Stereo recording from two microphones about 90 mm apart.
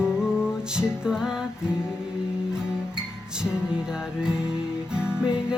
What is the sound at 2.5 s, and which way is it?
Music, 10° right (ahead or behind).